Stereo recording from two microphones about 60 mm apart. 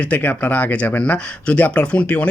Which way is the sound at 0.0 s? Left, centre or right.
Left.